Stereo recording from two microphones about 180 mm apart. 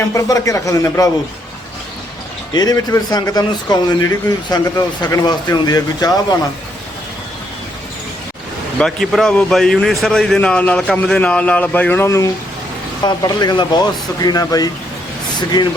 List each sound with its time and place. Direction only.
0.1 s a man's voice: 20° left (ahead or behind)
2.5 s a man's voice: 20° left (ahead or behind)
8.8 s a man's voice: centre (ahead or behind); by 14.7 s 20° left (ahead or behind)